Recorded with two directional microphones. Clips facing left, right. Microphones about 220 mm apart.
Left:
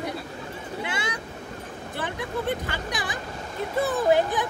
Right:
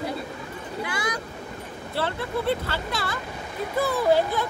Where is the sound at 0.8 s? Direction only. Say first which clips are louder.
Right 2 dB; 25° left (ahead or behind).